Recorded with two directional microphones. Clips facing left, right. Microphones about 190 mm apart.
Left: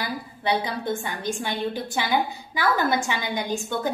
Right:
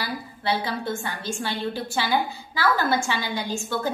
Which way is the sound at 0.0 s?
20° left (ahead or behind).